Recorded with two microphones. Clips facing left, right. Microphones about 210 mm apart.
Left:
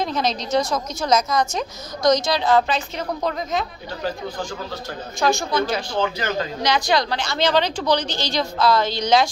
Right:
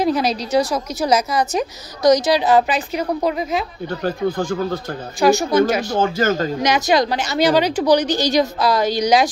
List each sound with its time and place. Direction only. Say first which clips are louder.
0.0 s a sound: right 5 dB; 10° right (ahead or behind)
0.5 s a woman's voice: right 3 dB; 35° right (ahead or behind)
1.0 s a woman's voice: right 2 dB; 10° right (ahead or behind)
4.0 s speech: right 6 dB; 55° right (ahead or behind)
5.3 s speech: right 8 dB; 40° right (ahead or behind)
6.6 s a woman's voice: right 3 dB; 20° right (ahead or behind)